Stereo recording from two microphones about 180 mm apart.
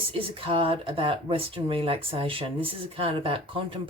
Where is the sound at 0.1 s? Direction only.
30° right (ahead or behind).